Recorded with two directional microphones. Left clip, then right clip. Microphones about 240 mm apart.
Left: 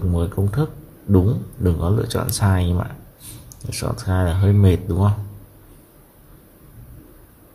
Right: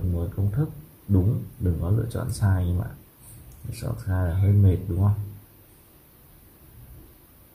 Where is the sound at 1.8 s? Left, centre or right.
Left.